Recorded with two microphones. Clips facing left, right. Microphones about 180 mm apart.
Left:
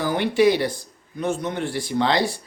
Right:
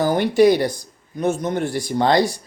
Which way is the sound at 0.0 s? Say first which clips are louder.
Right 4 dB; 45° right (ahead or behind).